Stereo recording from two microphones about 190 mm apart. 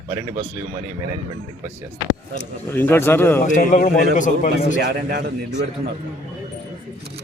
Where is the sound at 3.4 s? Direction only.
40° left (ahead or behind).